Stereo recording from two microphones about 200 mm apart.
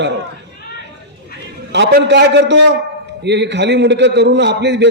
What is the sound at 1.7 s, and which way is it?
A man's voice, 60° right (ahead or behind).